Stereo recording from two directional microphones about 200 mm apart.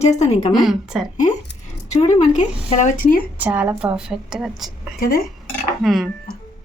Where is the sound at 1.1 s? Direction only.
40° left (ahead or behind).